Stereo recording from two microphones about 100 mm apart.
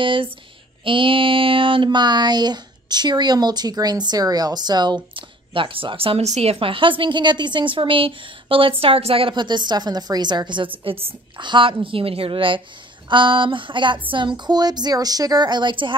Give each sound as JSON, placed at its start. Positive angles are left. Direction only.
{"t": 0.0, "sound": "mantra", "side_deg": -55}
{"t": 9.3, "sound": "a woman's voice", "side_deg": -50}
{"t": 10.8, "sound": "a woman's voice", "side_deg": -70}
{"t": 11.4, "sound": "mantra", "side_deg": -55}
{"t": 14.1, "sound": "a woman's voice", "side_deg": -50}